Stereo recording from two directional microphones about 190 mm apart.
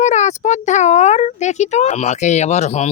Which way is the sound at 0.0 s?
40° left (ahead or behind).